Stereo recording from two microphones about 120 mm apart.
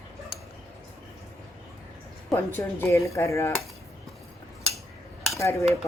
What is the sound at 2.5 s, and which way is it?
A woman's voice, 20° left (ahead or behind).